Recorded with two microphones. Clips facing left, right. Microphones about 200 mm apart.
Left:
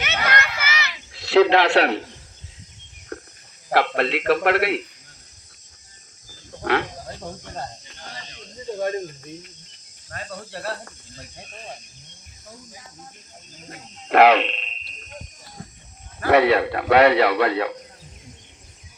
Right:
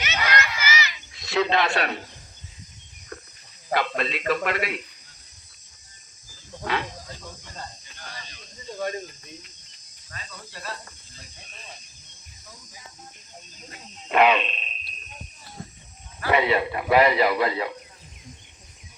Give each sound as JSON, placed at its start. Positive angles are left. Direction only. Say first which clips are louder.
{"t": 0.2, "sound": "a sound", "louder": "even", "side_deg": 55}
{"t": 3.7, "sound": "speech", "louder": "left 5 dB", "side_deg": 70}
{"t": 6.7, "sound": "a sound", "louder": "left 6 dB", "side_deg": 65}
{"t": 8.8, "sound": "speech", "louder": "left 4 dB", "side_deg": 50}
{"t": 13.7, "sound": "speech", "louder": "left 7 dB", "side_deg": 65}
{"t": 16.3, "sound": "speech", "louder": "left 5 dB", "side_deg": 70}